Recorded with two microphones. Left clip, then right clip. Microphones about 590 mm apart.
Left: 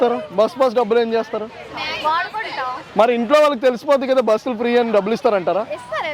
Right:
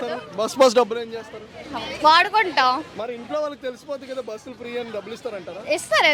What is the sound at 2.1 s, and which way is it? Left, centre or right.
Speech, right.